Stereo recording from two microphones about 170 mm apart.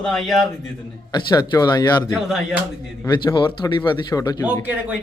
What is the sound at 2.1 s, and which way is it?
Speech, centre (ahead or behind).